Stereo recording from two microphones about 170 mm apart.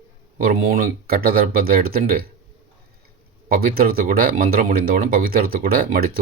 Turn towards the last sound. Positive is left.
turn(degrees=-60)  # may be behind; listen again after turning